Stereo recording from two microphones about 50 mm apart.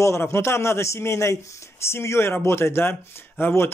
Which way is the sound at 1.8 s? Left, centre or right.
Left.